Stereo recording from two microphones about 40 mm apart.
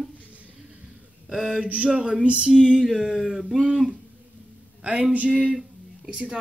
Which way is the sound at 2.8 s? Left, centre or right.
Centre.